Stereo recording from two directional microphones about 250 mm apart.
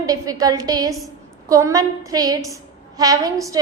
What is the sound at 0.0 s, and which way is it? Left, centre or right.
A woman's voice, centre.